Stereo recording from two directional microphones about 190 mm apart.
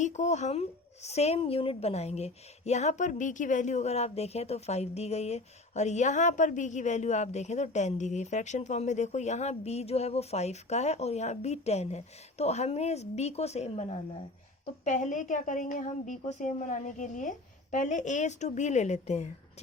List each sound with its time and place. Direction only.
0.0 s a woman's voice: 40° left (ahead or behind)